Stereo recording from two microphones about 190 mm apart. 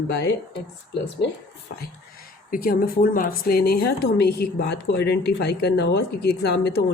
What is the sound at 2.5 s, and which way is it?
Speech, 50° left (ahead or behind).